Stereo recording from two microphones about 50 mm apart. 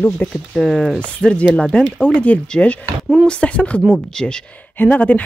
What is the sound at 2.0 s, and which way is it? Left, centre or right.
Speech, left.